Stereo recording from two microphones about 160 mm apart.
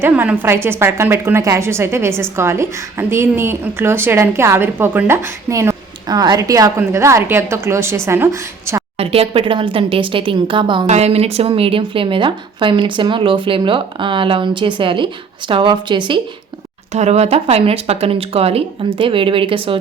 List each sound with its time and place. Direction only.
0.0 s a woman's voice: 10° right (ahead or behind)
9.0 s a woman's voice: 35° right (ahead or behind)
10.8 s a woman's voice: 40° right (ahead or behind)
16.9 s a woman's voice: 45° right (ahead or behind)